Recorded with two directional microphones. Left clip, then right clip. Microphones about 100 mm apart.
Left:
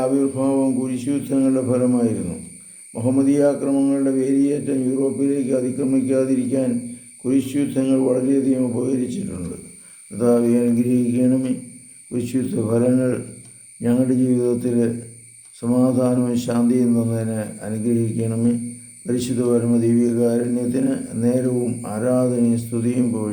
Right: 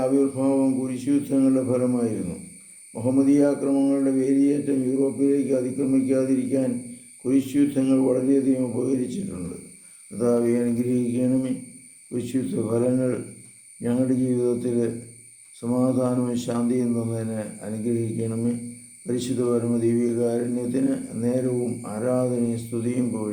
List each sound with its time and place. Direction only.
0.0 s speech: 15° left (ahead or behind)